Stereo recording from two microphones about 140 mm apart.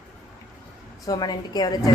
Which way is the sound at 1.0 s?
30° left (ahead or behind).